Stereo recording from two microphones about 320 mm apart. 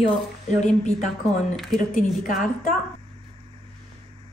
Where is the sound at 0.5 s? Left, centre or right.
Left.